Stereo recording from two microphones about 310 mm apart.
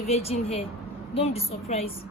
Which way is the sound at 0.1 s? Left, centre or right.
Centre.